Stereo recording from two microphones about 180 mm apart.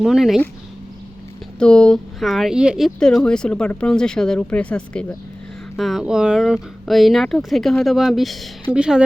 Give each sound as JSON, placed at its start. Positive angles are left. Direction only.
{"t": 0.0, "sound": "speech", "side_deg": 0}
{"t": 1.5, "sound": "speech", "side_deg": 5}